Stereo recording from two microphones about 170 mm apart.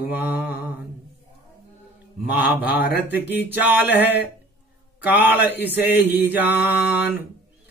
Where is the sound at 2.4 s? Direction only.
70° left (ahead or behind).